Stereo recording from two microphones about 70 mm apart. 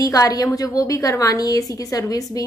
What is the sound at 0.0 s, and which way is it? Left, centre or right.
A woman's voice, left.